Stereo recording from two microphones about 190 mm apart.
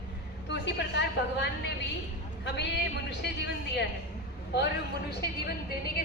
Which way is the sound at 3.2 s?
60° left (ahead or behind).